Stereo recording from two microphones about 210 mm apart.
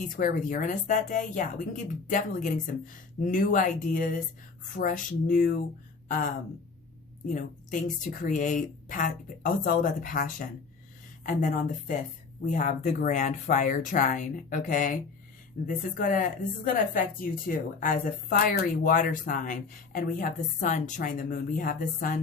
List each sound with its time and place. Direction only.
0.2 s a woman's voice: 40° left (ahead or behind)
7.3 s a woman's voice: 35° left (ahead or behind)